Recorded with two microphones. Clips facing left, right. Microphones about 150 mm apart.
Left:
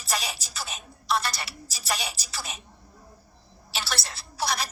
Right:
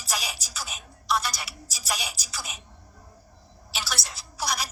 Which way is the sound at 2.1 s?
30° left (ahead or behind).